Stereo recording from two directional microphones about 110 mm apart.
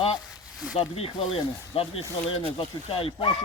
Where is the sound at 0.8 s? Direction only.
60° left (ahead or behind).